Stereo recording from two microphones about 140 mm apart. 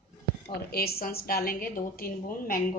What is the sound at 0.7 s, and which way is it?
A woman's voice, 90° left.